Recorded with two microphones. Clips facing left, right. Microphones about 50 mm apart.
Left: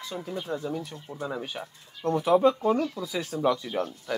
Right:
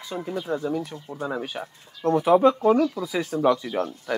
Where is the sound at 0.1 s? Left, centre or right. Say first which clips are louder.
Right 5 dB; right.